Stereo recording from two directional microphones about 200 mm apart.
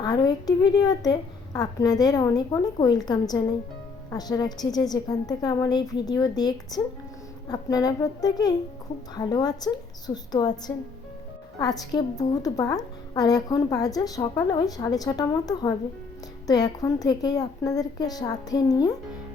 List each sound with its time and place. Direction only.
0.0 s a woman's voice: 20° left (ahead or behind)
11.6 s a woman's voice: 20° left (ahead or behind)